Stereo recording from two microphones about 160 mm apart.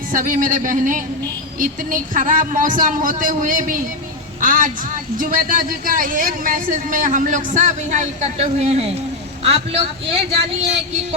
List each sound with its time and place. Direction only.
0.1 s speech: 55° right (ahead or behind); by 11.0 s 40° right (ahead or behind)